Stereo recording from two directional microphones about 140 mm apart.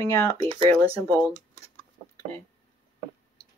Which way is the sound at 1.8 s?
20° left (ahead or behind).